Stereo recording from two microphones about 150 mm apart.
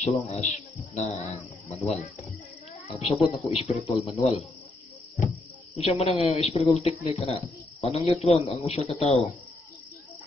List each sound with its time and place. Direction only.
0.0 s speech: 45° left (ahead or behind)
2.9 s speech: 45° left (ahead or behind)
5.8 s speech: 45° left (ahead or behind)